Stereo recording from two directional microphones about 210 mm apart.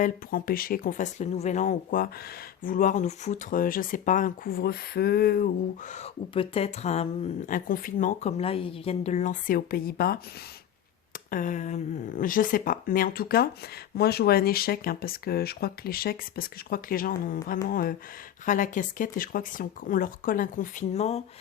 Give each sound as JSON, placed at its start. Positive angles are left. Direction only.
{"t": 0.0, "sound": "speech", "side_deg": 45}
{"t": 5.9, "sound": "speech", "side_deg": 30}
{"t": 11.3, "sound": "speech", "side_deg": 40}